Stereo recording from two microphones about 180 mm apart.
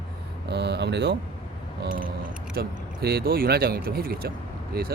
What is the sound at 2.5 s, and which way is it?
Speech, 60° right (ahead or behind).